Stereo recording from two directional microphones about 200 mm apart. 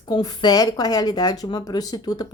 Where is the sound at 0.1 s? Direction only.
20° left (ahead or behind).